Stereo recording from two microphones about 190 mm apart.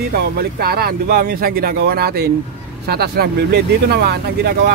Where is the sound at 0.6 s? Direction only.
55° right (ahead or behind).